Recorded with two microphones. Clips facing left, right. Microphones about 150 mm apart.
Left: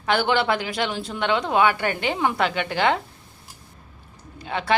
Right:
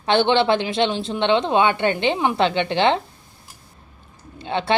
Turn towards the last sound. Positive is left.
turn(degrees=-30)  # may be behind; listen again after turning